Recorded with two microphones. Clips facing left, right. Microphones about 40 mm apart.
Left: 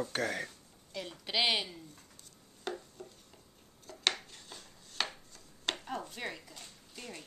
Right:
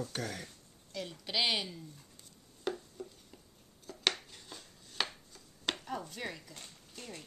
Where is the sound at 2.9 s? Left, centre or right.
Centre.